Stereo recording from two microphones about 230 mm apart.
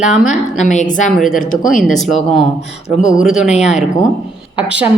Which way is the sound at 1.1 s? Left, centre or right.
Centre.